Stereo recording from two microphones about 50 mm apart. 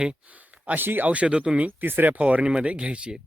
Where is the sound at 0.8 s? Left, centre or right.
Right.